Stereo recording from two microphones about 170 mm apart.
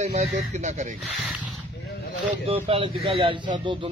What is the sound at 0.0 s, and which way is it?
Speech, 40° right (ahead or behind).